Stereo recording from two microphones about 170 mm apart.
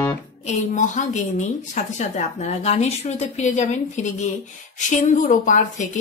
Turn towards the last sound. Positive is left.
turn(degrees=50)  # may be behind; listen again after turning